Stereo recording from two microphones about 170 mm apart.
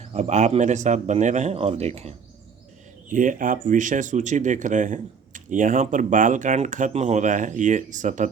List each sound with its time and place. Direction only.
0.1 s speech: 40° right (ahead or behind)
3.1 s speech: 50° right (ahead or behind)